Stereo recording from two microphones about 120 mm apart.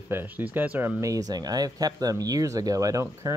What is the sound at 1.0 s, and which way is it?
Speech, 30° right (ahead or behind).